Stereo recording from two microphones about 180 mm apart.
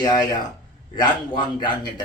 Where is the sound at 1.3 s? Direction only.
25° left (ahead or behind).